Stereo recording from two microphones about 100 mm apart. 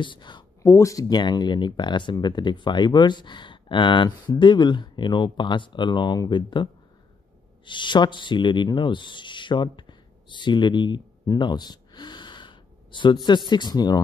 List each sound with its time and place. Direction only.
0.0 s speech: 50° left (ahead or behind)
0.6 s speech: 30° left (ahead or behind)